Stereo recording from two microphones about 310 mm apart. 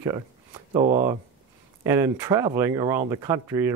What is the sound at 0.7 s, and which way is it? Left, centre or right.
Speech, right.